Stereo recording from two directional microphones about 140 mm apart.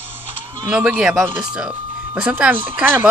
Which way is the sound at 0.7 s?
5° right (ahead or behind).